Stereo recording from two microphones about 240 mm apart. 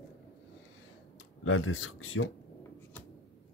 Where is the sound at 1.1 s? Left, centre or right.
Left.